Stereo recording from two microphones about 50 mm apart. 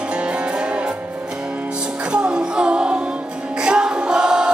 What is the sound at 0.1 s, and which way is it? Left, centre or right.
Music, right.